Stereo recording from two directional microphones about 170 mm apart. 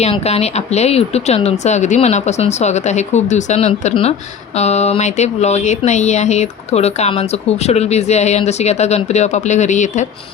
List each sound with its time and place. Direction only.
0.0 s speech: 40° left (ahead or behind)